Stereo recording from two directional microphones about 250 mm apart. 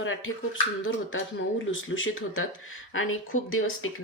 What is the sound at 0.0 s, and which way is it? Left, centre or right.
Speech, left.